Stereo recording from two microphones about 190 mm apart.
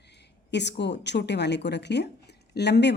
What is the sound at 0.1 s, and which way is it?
Speech, 65° left (ahead or behind).